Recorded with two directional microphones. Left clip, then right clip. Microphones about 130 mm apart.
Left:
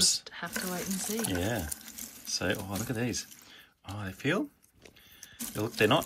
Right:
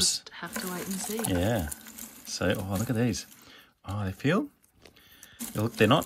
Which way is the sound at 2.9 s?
35° right (ahead or behind).